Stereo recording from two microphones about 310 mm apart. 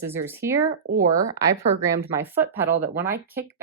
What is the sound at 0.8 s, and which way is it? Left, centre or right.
Speech, right.